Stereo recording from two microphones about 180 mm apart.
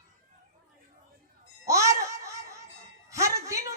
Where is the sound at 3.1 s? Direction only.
15° right (ahead or behind).